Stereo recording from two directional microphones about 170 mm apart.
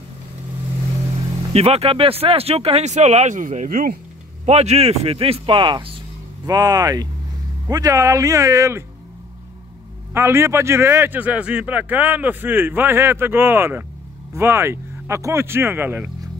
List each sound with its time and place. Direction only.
1.5 s speech: 35° right (ahead or behind); by 4.0 s 55° right (ahead or behind)
4.5 s speech: 40° right (ahead or behind); by 8.8 s 15° right (ahead or behind)
10.1 s speech: 15° right (ahead or behind)